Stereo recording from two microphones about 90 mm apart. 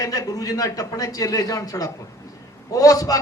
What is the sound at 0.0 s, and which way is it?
A man's voice, 40° left (ahead or behind).